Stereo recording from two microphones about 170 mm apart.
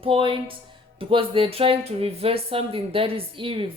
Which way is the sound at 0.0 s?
30° right (ahead or behind).